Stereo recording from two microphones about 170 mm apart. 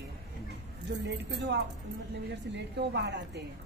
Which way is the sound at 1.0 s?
90° right.